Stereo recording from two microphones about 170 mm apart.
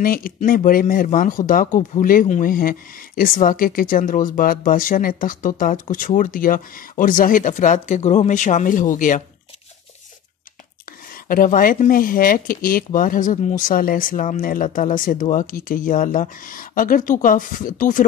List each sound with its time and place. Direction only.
0.0 s speech: 55° left (ahead or behind)
11.2 s speech: 55° left (ahead or behind)